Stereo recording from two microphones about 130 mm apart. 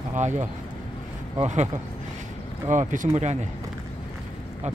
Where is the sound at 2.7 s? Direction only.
75° right (ahead or behind).